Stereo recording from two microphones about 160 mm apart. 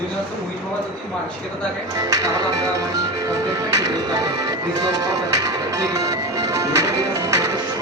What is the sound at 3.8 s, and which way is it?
Music, 20° right (ahead or behind).